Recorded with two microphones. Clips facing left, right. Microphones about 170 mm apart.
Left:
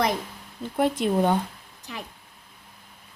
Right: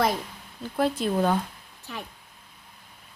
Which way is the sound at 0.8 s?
15° left (ahead or behind).